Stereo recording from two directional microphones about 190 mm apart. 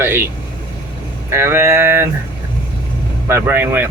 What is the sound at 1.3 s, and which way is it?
Speech, 15° right (ahead or behind).